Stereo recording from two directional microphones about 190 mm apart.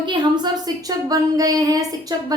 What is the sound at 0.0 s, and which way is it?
A woman's voice, 25° right (ahead or behind).